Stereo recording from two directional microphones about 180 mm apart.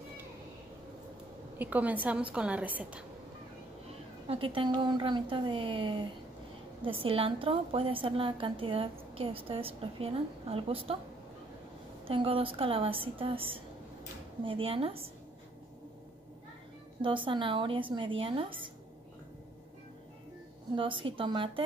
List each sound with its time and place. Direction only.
1.6 s a woman's voice: 10° right (ahead or behind)
4.3 s a woman's voice: 30° right (ahead or behind)
12.1 s a woman's voice: 30° right (ahead or behind)
17.0 s a woman's voice: 30° right (ahead or behind)
20.7 s a woman's voice: 30° right (ahead or behind)